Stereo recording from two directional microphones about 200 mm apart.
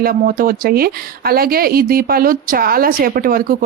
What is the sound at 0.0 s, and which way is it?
Speech, 45° right (ahead or behind).